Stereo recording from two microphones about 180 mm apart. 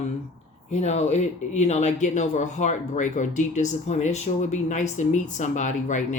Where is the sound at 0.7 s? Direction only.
40° left (ahead or behind).